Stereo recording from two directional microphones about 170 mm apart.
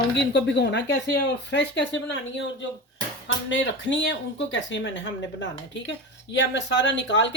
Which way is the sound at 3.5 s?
90° left.